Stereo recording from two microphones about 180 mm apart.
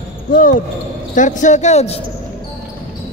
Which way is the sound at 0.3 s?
50° left (ahead or behind).